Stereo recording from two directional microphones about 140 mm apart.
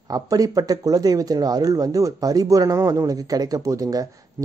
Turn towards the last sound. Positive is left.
turn(degrees=-25)  # may be behind; listen again after turning